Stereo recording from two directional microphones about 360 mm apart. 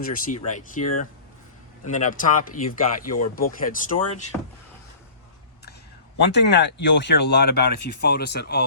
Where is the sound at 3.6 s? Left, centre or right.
Left.